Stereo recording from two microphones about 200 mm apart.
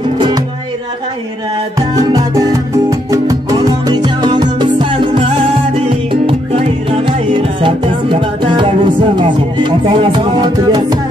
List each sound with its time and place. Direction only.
1.8 s music: 15° right (ahead or behind)